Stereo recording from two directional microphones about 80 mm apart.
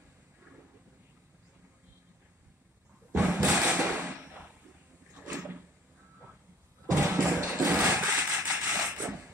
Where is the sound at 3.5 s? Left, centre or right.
Centre.